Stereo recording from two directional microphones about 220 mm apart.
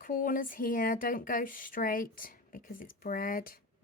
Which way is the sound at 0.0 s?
40° left (ahead or behind).